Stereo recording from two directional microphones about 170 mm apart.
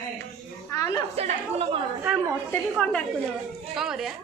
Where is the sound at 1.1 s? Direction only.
40° right (ahead or behind).